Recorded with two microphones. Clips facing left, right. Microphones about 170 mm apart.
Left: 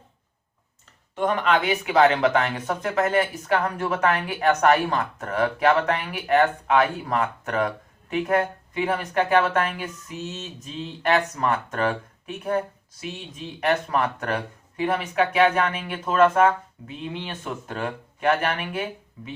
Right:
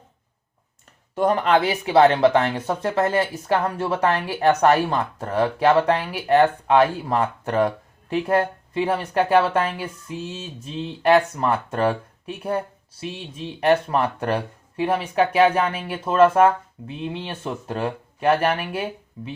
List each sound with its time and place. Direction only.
1.1 s speech: 40° right (ahead or behind)
13.0 s speech: 30° right (ahead or behind)